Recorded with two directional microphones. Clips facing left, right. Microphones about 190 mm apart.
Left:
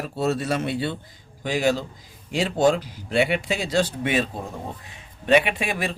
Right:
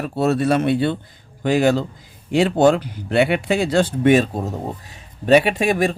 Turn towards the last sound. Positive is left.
turn(degrees=-45)  # may be behind; listen again after turning